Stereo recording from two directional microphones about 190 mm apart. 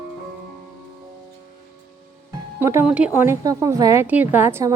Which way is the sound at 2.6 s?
10° right (ahead or behind).